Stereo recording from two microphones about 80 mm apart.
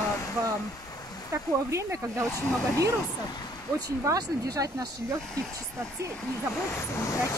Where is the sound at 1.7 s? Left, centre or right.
Right.